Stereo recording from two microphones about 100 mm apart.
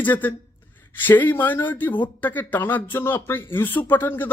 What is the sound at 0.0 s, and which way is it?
Speech, 20° left (ahead or behind).